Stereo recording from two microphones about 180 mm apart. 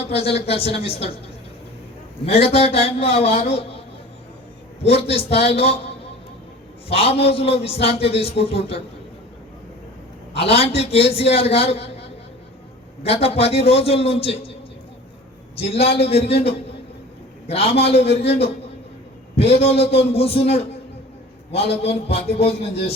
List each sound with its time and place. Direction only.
0.0 s a man's voice: 35° left (ahead or behind)
2.2 s a man's voice: 35° left (ahead or behind)
4.8 s a man's voice: 35° left (ahead or behind)
6.8 s a man's voice: 35° left (ahead or behind)
10.3 s a man's voice: 35° left (ahead or behind)
15.5 s a man's voice: 35° left (ahead or behind)